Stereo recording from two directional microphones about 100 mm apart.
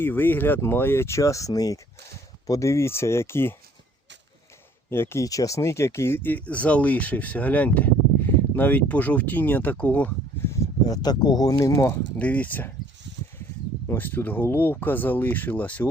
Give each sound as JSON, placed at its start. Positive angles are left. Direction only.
{"t": 0.0, "sound": "speech", "side_deg": 20}
{"t": 4.9, "sound": "speech", "side_deg": 25}
{"t": 10.8, "sound": "speech", "side_deg": 40}
{"t": 12.1, "sound": "speech", "side_deg": 15}
{"t": 13.8, "sound": "speech", "side_deg": 20}